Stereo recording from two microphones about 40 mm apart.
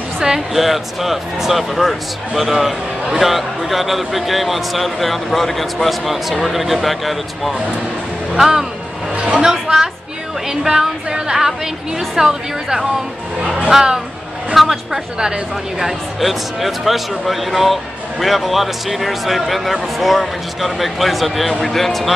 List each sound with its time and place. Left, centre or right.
0.6 s a woman's voice: centre
13.4 s speech: right
13.7 s a woman's voice: centre
15.8 s speech: centre